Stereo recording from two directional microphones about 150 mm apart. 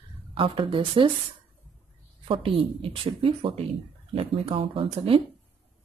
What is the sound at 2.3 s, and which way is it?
Speech, 35° right (ahead or behind).